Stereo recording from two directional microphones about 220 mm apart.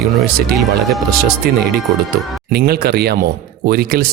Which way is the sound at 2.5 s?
45° right (ahead or behind).